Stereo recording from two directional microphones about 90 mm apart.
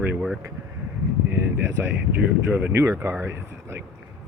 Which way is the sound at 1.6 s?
30° right (ahead or behind).